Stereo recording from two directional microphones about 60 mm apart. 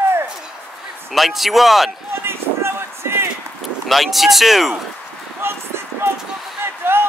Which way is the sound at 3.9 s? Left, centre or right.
Centre.